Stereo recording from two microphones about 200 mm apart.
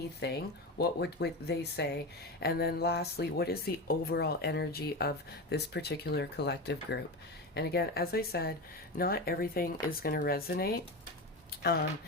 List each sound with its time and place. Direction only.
0.2 s speech: 60° left (ahead or behind)